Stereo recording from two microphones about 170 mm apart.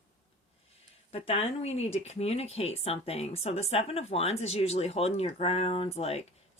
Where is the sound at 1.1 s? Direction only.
35° left (ahead or behind).